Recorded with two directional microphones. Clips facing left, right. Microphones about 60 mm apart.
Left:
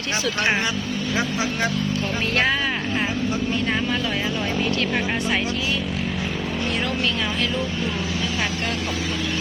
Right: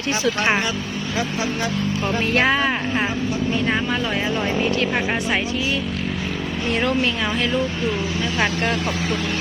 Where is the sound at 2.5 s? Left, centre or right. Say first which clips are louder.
Right 3 dB; right.